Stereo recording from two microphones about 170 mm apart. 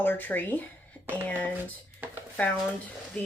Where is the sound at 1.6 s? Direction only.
10° right (ahead or behind).